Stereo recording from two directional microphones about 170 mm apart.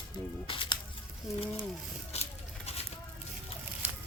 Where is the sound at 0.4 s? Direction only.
30° left (ahead or behind).